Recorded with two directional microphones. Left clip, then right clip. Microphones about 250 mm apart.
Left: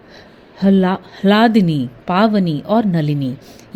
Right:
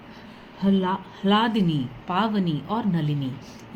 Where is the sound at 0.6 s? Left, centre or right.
Left.